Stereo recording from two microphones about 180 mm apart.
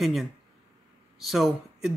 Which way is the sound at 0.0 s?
Centre (ahead or behind).